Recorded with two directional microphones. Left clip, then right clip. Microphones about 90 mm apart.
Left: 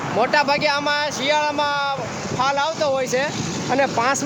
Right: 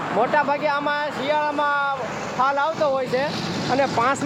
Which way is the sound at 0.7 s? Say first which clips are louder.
Left 2 dB; 25° left (ahead or behind).